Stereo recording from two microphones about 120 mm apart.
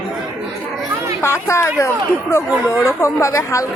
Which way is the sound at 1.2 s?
20° left (ahead or behind).